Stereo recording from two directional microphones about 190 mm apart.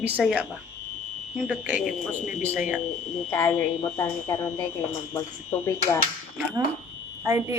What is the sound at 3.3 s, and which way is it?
A woman's voice, 10° left (ahead or behind).